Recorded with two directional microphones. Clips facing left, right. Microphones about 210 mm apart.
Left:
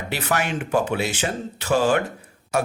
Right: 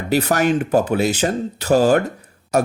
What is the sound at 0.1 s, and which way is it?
Speech, 40° right (ahead or behind).